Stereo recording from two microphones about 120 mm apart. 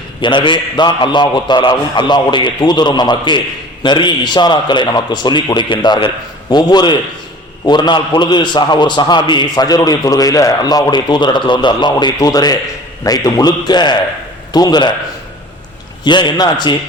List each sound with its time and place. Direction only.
0.2 s a man's voice: 40° left (ahead or behind)
16.0 s a man's voice: 40° left (ahead or behind)